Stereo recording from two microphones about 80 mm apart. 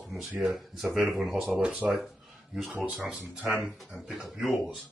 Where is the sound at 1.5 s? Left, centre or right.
Centre.